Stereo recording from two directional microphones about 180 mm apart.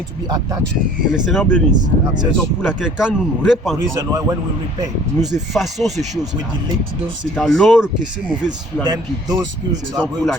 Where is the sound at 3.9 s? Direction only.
20° right (ahead or behind).